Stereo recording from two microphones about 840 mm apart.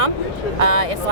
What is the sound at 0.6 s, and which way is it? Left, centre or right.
Speech, right.